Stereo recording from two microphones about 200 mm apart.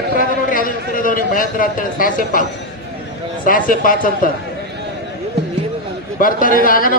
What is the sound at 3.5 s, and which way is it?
Speech, 45° left (ahead or behind).